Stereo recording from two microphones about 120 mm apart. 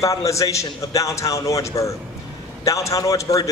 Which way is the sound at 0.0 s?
25° left (ahead or behind).